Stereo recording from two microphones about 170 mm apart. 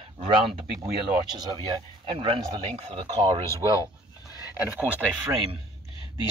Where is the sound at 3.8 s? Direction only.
20° left (ahead or behind).